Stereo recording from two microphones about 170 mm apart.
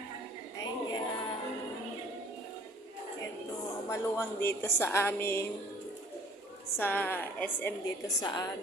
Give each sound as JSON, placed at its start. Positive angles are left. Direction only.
{"t": 0.6, "sound": "music", "side_deg": 25}
{"t": 3.8, "sound": "a woman's voice", "side_deg": 15}
{"t": 6.7, "sound": "a woman's voice", "side_deg": 10}
{"t": 7.9, "sound": "a woman's voice", "side_deg": 25}